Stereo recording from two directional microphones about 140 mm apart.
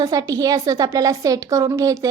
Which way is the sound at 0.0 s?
25° right (ahead or behind).